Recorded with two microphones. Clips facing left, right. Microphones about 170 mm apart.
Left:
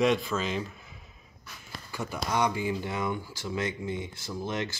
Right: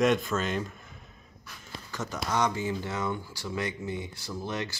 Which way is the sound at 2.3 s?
15° left (ahead or behind).